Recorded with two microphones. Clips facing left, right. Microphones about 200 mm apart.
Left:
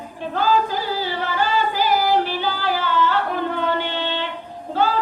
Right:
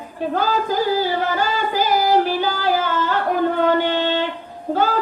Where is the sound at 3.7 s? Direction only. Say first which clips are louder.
Right 6 dB; 45° right (ahead or behind).